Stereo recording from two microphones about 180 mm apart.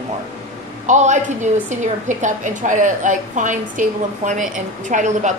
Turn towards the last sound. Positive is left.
turn(degrees=-45)  # may be behind; listen again after turning